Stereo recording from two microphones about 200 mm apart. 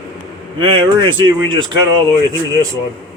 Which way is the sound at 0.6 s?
25° right (ahead or behind).